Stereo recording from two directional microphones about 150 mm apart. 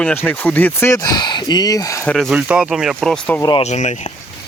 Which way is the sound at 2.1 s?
Centre (ahead or behind).